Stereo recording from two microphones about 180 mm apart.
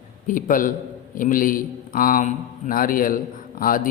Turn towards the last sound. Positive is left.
turn(degrees=50)  # may be behind; listen again after turning